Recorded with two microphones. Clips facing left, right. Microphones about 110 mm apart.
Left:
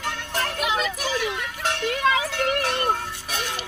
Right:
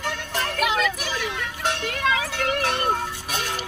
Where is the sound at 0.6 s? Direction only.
25° left (ahead or behind).